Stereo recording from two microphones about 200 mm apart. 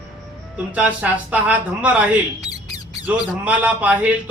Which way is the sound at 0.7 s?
5° right (ahead or behind).